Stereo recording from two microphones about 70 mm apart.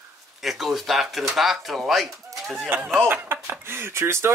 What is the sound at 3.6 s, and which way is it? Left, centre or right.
Speech, right.